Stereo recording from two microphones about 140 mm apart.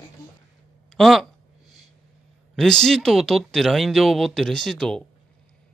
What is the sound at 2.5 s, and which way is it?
Speech, 5° left (ahead or behind).